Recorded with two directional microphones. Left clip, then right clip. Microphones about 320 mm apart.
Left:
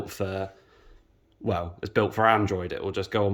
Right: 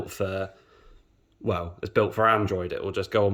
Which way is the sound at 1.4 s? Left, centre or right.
Centre.